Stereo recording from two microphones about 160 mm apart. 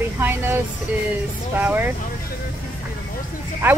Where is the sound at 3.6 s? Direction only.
10° right (ahead or behind).